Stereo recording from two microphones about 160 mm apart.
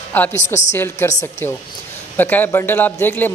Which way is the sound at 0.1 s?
10° left (ahead or behind).